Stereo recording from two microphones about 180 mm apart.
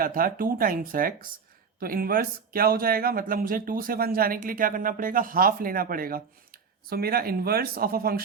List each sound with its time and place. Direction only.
0.0 s speech: 50° right (ahead or behind)